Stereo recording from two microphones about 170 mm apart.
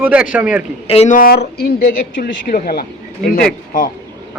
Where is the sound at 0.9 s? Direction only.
40° left (ahead or behind).